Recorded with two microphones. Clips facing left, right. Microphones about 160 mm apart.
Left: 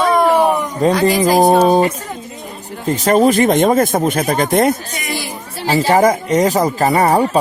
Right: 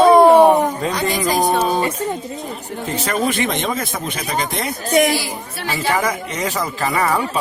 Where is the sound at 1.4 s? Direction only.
35° left (ahead or behind).